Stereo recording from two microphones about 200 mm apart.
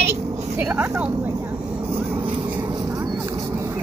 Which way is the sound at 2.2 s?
25° right (ahead or behind).